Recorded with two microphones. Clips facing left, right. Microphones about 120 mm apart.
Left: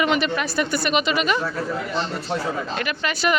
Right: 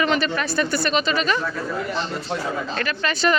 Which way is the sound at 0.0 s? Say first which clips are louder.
Even; 15° left (ahead or behind).